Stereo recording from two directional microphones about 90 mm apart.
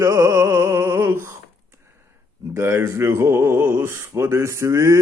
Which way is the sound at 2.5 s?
30° right (ahead or behind).